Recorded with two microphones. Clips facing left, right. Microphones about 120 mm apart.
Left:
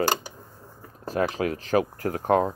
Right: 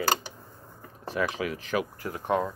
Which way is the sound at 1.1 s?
45° left (ahead or behind).